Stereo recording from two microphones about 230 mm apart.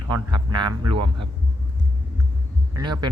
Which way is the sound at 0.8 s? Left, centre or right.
Right.